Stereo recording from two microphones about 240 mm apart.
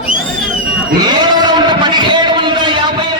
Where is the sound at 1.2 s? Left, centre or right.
Centre.